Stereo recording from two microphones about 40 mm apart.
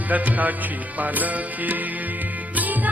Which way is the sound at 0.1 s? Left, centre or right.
Right.